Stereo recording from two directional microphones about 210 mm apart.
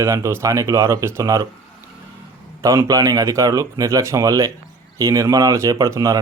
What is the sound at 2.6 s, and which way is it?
Speech, 15° right (ahead or behind).